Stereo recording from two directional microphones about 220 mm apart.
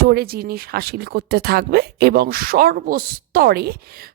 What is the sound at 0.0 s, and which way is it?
Speech, 45° right (ahead or behind).